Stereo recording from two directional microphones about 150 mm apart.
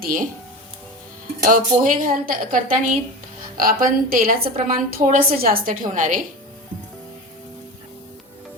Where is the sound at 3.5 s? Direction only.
75° right (ahead or behind).